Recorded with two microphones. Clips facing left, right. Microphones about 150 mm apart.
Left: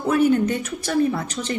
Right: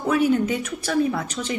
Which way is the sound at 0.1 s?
Centre (ahead or behind).